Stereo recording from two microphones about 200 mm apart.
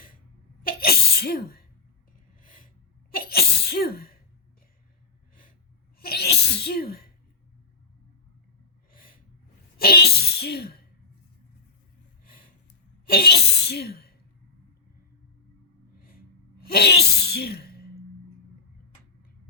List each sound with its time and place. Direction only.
0.6 s sneeze: 45° left (ahead or behind)
2.4 s snort: 45° left (ahead or behind)
3.1 s sneeze: 50° left (ahead or behind)
6.0 s sneeze: 50° left (ahead or behind)
9.7 s a sound: 50° left (ahead or behind)
12.2 s a sound: 45° left (ahead or behind)
13.1 s speech: 50° left (ahead or behind)
16.6 s gasp: 50° left (ahead or behind)